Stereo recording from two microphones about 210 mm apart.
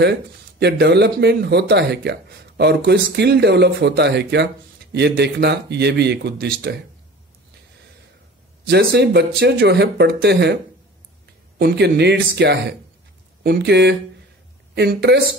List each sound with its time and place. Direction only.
0.0 s speech: 55° right (ahead or behind)
8.9 s speech: 50° right (ahead or behind)